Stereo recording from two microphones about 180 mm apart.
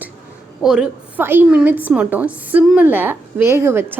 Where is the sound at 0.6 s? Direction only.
5° right (ahead or behind).